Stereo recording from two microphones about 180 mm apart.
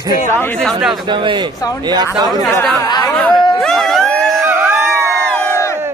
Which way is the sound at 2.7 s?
20° left (ahead or behind).